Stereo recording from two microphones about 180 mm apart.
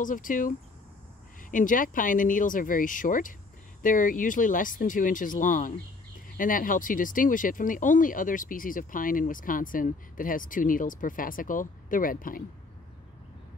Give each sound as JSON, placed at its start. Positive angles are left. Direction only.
{"t": 0.0, "sound": "speech", "side_deg": 45}